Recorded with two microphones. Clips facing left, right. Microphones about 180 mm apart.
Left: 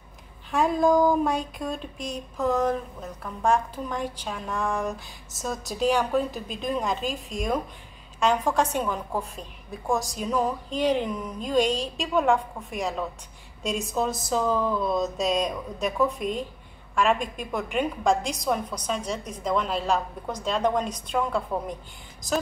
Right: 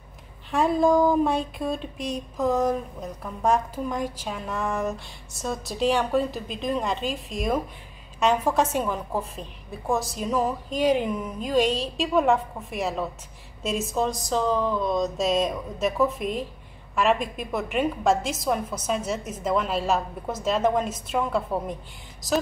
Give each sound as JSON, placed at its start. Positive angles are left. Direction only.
{"t": 0.5, "sound": "a woman's voice", "side_deg": 0}
{"t": 2.0, "sound": "a sound", "side_deg": -35}
{"t": 2.3, "sound": "a woman's voice", "side_deg": -10}